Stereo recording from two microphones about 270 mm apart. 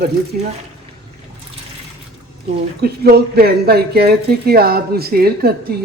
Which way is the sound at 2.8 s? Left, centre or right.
Right.